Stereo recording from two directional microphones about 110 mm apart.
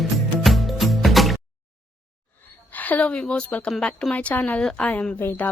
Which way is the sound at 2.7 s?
15° left (ahead or behind).